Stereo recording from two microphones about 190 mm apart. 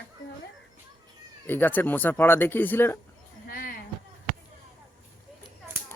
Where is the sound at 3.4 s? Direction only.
50° left (ahead or behind).